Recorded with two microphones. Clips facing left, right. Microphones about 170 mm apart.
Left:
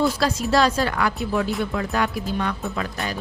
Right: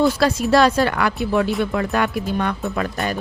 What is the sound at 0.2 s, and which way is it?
Speech, 60° right (ahead or behind).